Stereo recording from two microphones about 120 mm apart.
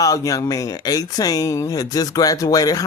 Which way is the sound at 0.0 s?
30° left (ahead or behind).